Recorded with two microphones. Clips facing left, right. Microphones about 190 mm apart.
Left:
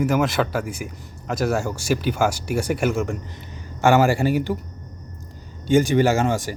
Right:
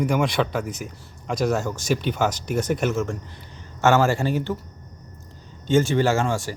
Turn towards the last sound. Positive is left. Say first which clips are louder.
# left 2 dB
turn(degrees=15)  # may be behind; listen again after turning